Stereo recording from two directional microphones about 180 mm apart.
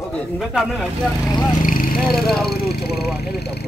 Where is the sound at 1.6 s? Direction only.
50° left (ahead or behind).